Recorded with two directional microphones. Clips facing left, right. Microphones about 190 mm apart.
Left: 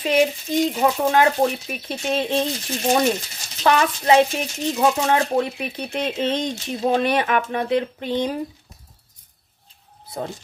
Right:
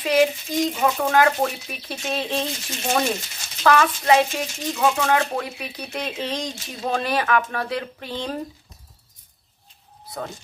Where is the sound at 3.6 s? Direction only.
20° left (ahead or behind).